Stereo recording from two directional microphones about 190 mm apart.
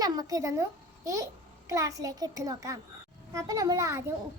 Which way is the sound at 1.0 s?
15° right (ahead or behind).